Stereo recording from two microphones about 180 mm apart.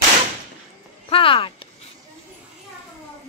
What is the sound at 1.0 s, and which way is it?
Speech, 30° left (ahead or behind).